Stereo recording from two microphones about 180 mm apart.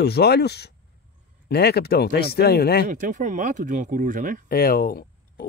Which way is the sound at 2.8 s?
45° right (ahead or behind).